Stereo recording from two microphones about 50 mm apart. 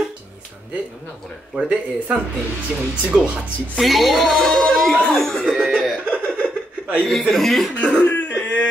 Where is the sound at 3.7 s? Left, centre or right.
Centre.